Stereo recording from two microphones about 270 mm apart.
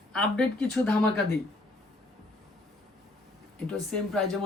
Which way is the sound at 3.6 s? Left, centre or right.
Centre.